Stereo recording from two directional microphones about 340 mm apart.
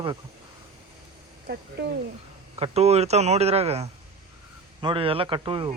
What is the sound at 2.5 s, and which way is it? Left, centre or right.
Speech, centre.